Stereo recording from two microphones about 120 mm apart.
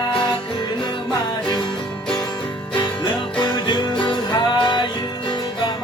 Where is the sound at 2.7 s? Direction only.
40° left (ahead or behind).